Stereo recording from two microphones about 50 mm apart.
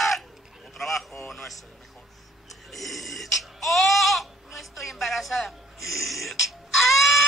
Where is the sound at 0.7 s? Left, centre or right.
Centre.